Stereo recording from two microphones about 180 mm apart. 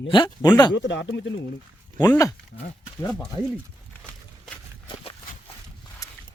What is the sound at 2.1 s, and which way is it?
Speech, 20° left (ahead or behind).